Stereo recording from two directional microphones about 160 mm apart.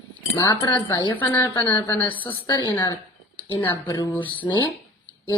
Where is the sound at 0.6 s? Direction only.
25° left (ahead or behind).